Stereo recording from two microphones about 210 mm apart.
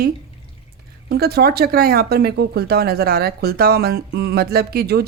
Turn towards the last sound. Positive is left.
turn(degrees=-50)  # may be behind; listen again after turning